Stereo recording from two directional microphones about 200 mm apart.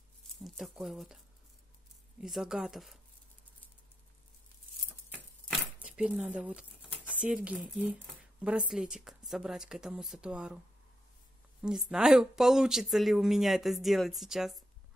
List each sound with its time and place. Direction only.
0.3 s speech: centre (ahead or behind)
5.8 s speech: 5° right (ahead or behind)
11.6 s speech: 5° right (ahead or behind)